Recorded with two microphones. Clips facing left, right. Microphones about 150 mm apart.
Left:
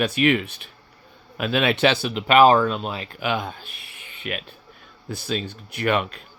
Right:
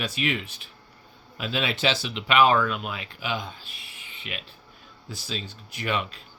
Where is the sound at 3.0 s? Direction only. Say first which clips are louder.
Left 6 dB; 60° left (ahead or behind).